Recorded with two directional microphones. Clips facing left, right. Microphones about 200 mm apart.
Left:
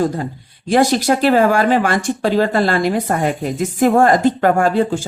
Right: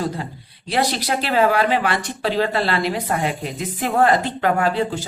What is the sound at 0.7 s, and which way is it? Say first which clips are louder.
Speech: left 8 dB; 45° left (ahead or behind).